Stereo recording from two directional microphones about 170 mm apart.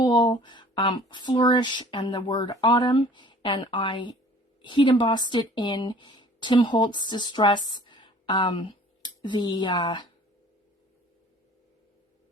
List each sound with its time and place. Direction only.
0.0 s speech: 25° left (ahead or behind)